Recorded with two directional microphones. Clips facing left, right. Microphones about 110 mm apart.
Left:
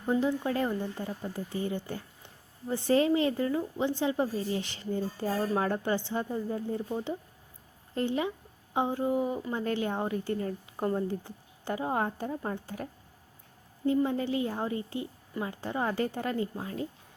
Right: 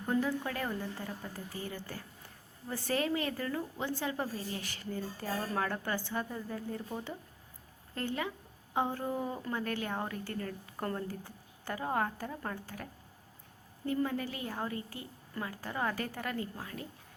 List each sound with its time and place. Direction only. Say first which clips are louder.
0.0 s speech: left 4 dB; 20° left (ahead or behind)